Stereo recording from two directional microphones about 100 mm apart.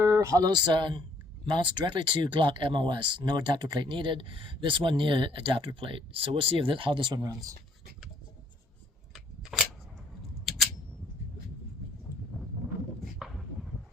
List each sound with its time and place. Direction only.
0.0 s speech: 35° right (ahead or behind); by 7.3 s 50° right (ahead or behind)
9.1 s scissors: 5° right (ahead or behind)
13.1 s a sound: 5° right (ahead or behind)